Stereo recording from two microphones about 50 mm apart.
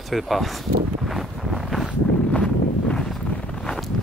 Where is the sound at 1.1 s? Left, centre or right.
Centre.